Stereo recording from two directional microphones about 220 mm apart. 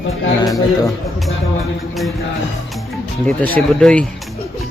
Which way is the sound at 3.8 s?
5° left (ahead or behind).